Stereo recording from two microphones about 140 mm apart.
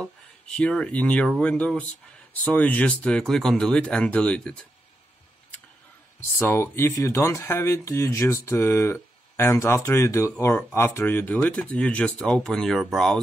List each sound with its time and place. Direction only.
0.0 s speech: 5° left (ahead or behind)
6.3 s speech: 20° left (ahead or behind); by 13.2 s centre (ahead or behind)